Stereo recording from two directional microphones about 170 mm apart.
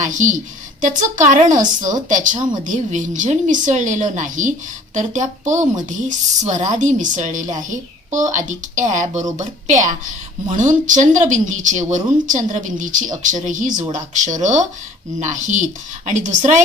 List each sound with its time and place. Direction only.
0.0 s a woman's voice: 45° right (ahead or behind)